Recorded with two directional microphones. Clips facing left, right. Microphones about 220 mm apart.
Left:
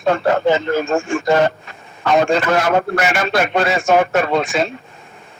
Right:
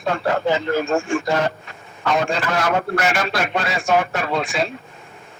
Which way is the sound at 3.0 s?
Centre (ahead or behind).